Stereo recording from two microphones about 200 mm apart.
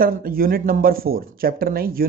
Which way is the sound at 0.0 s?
45° right (ahead or behind).